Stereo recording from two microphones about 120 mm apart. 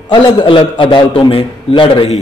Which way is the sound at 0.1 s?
40° left (ahead or behind).